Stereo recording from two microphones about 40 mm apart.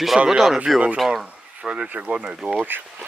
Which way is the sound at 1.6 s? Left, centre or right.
Right.